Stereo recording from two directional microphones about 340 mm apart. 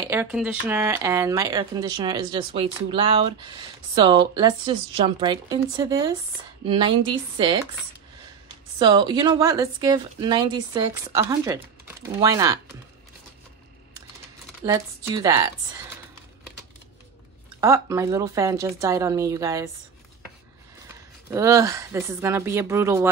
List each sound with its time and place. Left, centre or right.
0.1 s speech: centre
8.7 s speech: centre
14.7 s speech: centre
17.6 s speech: centre
21.3 s speech: centre